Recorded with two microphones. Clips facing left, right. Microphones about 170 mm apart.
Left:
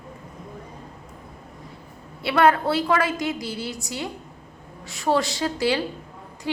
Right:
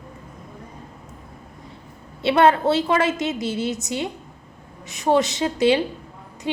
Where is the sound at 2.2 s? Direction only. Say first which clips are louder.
Right 3 dB; 25° right (ahead or behind).